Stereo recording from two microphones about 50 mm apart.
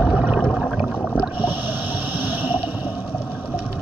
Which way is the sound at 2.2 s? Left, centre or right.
Right.